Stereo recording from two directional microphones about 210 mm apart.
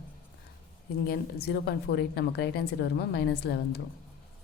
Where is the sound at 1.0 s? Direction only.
45° left (ahead or behind).